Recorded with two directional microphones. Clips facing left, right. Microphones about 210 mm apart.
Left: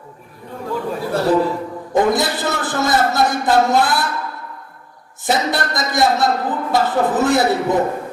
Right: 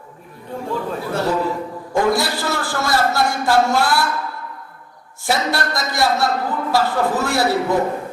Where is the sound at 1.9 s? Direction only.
20° left (ahead or behind).